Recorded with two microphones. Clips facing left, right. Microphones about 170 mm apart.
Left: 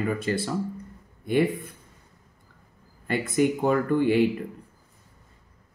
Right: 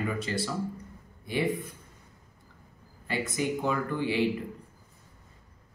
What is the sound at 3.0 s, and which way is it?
Speech, 55° left (ahead or behind).